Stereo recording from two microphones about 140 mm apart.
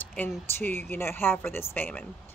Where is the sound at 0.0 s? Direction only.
10° left (ahead or behind).